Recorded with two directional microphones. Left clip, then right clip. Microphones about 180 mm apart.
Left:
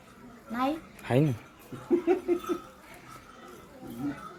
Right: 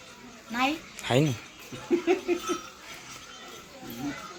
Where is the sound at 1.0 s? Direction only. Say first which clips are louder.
Right 2 dB; 5° left (ahead or behind).